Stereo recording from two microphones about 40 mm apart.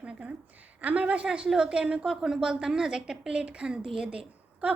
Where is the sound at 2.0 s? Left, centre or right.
Centre.